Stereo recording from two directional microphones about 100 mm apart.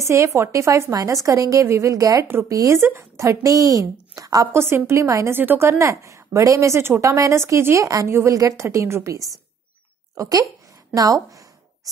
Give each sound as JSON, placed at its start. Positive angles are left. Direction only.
{"t": 0.0, "sound": "a woman's voice", "side_deg": -30}
{"t": 4.6, "sound": "a woman's voice", "side_deg": -25}